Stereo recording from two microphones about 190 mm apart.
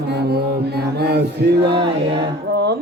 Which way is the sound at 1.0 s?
60° right (ahead or behind).